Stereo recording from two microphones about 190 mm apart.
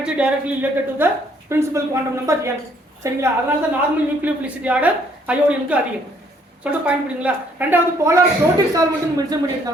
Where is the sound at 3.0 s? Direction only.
15° right (ahead or behind).